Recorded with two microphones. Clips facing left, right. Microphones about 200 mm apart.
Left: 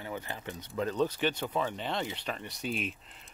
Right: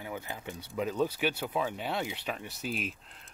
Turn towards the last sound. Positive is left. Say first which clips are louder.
# left 1 dB
turn(degrees=0)  # may be behind; listen again after turning